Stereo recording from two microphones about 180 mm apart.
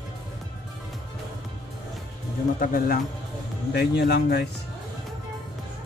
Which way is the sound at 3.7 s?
65° left (ahead or behind).